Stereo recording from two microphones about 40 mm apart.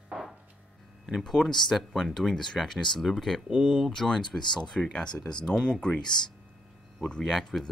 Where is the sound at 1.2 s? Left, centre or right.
Centre.